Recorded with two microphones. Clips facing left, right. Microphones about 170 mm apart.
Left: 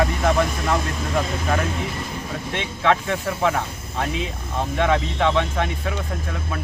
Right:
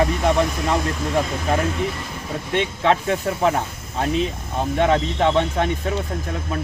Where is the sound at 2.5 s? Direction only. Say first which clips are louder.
Right 2 dB; 30° right (ahead or behind).